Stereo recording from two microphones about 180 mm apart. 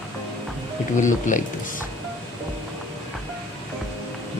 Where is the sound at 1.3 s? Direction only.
45° left (ahead or behind).